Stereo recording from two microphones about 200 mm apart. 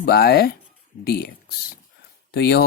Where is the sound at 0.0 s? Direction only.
50° left (ahead or behind).